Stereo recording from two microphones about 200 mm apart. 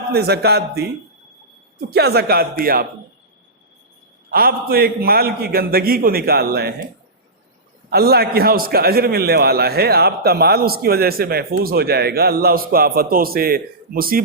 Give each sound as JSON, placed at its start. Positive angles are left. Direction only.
{"t": 0.1, "sound": "a man's voice", "side_deg": -55}
{"t": 1.9, "sound": "a man's voice", "side_deg": -55}
{"t": 4.3, "sound": "a man's voice", "side_deg": -50}
{"t": 7.9, "sound": "a man's voice", "side_deg": -50}